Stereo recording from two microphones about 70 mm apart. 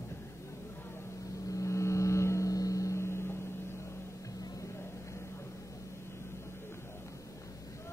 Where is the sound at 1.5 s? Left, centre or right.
Left.